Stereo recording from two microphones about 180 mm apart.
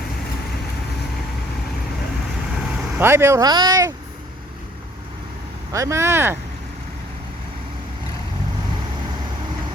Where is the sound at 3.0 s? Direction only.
15° right (ahead or behind).